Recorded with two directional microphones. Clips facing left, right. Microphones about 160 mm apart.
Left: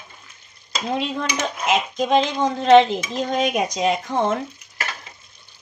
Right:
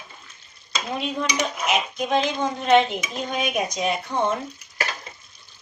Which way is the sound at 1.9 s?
90° left.